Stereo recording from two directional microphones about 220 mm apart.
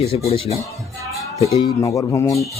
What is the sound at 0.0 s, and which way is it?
Speech, 25° left (ahead or behind).